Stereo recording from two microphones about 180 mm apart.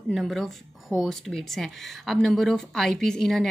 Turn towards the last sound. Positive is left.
turn(degrees=0)  # may be behind; listen again after turning